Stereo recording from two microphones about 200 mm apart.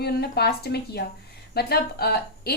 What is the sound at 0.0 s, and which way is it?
A woman's voice, 55° left (ahead or behind).